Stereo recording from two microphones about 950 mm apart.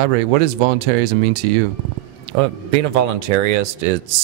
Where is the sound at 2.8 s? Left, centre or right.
Right.